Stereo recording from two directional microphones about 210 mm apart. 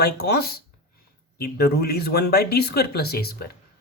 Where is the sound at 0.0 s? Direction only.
50° left (ahead or behind).